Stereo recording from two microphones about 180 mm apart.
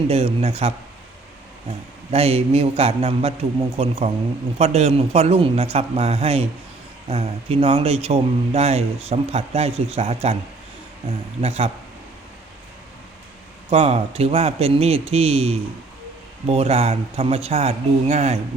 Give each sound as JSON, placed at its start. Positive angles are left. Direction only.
{"t": 0.1, "sound": "speech", "side_deg": -35}
{"t": 2.1, "sound": "speech", "side_deg": -35}
{"t": 11.3, "sound": "speech", "side_deg": -35}
{"t": 13.7, "sound": "speech", "side_deg": -35}